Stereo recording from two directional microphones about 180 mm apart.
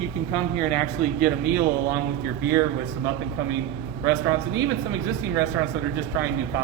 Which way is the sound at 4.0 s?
20° right (ahead or behind).